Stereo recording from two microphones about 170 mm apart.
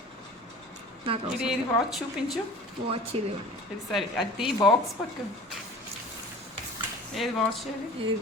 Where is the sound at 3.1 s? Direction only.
35° right (ahead or behind).